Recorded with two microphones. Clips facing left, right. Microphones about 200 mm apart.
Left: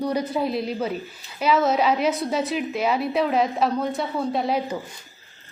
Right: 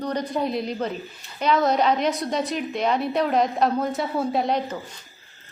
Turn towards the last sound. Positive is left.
turn(degrees=5)  # may be behind; listen again after turning